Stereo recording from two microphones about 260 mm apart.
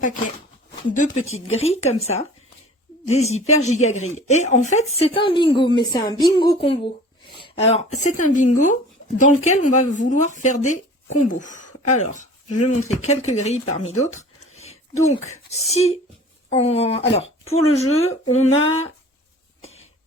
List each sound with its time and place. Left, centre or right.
0.9 s speech: left
14.0 s a sound: left
15.3 s speech: left
18.4 s speech: left